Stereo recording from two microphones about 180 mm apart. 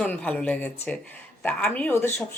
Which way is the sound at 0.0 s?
5° left (ahead or behind).